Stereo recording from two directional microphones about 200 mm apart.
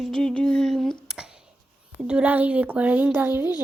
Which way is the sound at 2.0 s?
5° right (ahead or behind).